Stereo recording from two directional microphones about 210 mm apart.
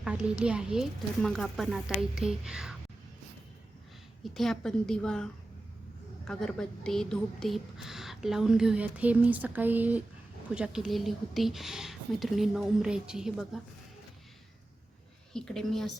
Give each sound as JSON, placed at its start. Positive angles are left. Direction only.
{"t": 0.0, "sound": "a woman's voice", "side_deg": -5}
{"t": 4.2, "sound": "a woman's voice", "side_deg": 0}
{"t": 15.3, "sound": "a woman's voice", "side_deg": 5}